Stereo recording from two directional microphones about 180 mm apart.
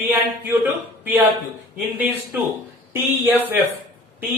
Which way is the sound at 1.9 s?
10° right (ahead or behind).